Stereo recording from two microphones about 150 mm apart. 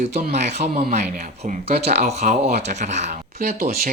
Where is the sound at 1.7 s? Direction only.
90° right.